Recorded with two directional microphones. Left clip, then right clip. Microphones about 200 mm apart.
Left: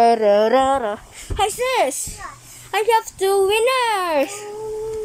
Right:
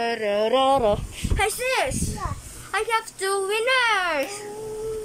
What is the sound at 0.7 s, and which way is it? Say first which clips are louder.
Speech: even; 10° right (ahead or behind).